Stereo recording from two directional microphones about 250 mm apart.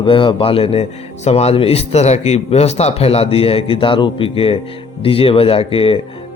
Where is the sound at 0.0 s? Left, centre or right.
Left.